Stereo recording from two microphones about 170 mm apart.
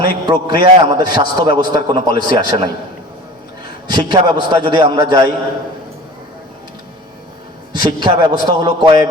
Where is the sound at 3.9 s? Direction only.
25° right (ahead or behind).